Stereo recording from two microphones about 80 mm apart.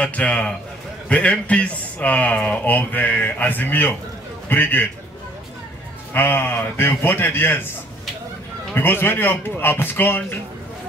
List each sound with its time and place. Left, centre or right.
0.0 s a man's voice: centre
6.1 s speech: left
8.7 s speech: left